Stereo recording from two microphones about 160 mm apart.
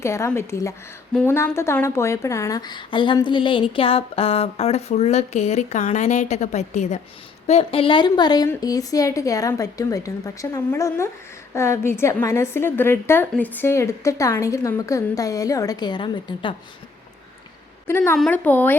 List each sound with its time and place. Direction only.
0.0 s a woman's voice: 15° left (ahead or behind)
17.8 s a woman's voice: 15° left (ahead or behind)